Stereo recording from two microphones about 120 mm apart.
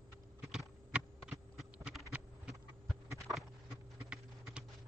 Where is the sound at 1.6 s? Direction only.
Centre (ahead or behind).